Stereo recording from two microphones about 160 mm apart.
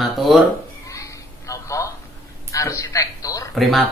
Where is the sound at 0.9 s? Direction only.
20° left (ahead or behind).